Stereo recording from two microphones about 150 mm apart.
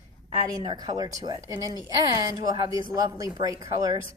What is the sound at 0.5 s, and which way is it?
Speech, 25° right (ahead or behind).